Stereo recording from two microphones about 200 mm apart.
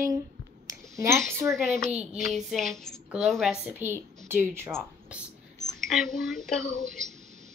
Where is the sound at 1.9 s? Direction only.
5° right (ahead or behind).